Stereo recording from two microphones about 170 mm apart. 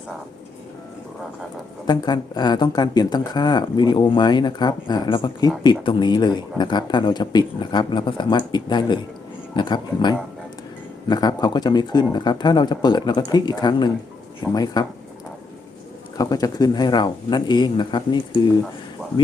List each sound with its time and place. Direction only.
1.9 s speech: 25° left (ahead or behind)
16.1 s speech: 20° left (ahead or behind)